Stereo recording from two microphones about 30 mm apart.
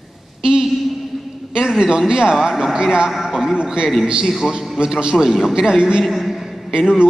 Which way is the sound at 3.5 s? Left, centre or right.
Right.